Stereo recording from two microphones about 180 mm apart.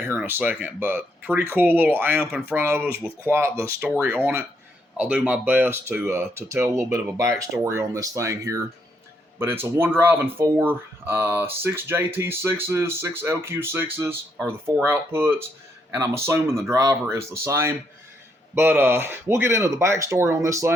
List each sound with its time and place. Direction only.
0.1 s speech: 10° right (ahead or behind)